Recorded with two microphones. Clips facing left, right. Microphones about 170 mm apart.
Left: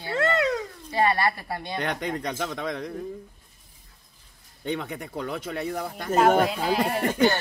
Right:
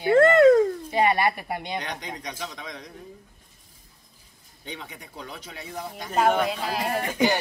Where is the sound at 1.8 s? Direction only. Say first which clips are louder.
Left 6 dB; 55° left (ahead or behind).